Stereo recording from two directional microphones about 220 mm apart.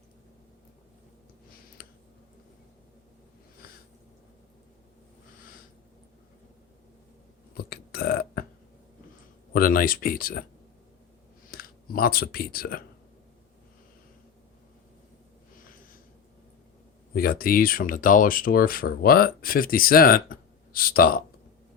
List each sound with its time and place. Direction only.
1.8 s a sound: 45° left (ahead or behind)
3.6 s a sound: 40° left (ahead or behind)
7.5 s burping: 45° left (ahead or behind)
9.5 s speech: 40° left (ahead or behind)
11.5 s speech: 45° left (ahead or behind)
17.2 s speech: 40° left (ahead or behind)